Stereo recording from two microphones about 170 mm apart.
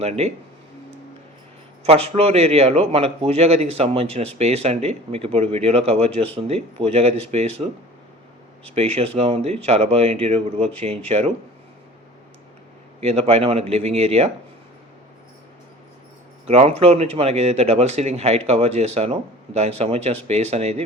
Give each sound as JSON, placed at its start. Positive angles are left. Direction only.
{"t": 1.9, "sound": "speech", "side_deg": -35}
{"t": 13.0, "sound": "speech", "side_deg": -35}
{"t": 16.5, "sound": "speech", "side_deg": -35}